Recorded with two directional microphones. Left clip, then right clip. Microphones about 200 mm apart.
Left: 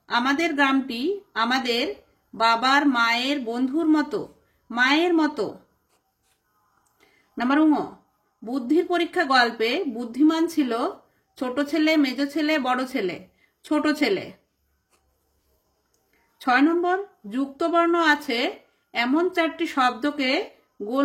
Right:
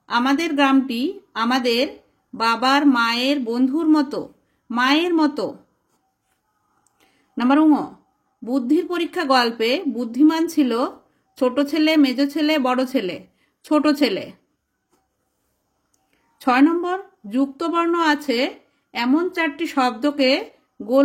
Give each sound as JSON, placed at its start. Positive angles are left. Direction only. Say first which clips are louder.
{"t": 0.0, "sound": "a woman's voice", "louder": "right 2 dB", "side_deg": -25}
{"t": 7.0, "sound": "a sound", "louder": "right 4 dB", "side_deg": -30}
{"t": 8.5, "sound": "a woman's voice", "louder": "right 2 dB", "side_deg": -30}
{"t": 16.3, "sound": "a woman's voice", "louder": "right 3 dB", "side_deg": -30}